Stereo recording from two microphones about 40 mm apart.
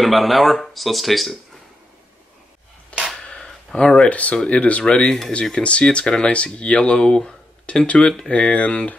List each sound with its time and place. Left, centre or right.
0.0 s speech: centre
3.2 s a sound: centre
4.1 s speech: left; by 7.3 s centre
7.6 s speech: left